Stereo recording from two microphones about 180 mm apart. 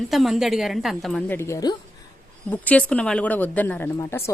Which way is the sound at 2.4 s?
10° left (ahead or behind).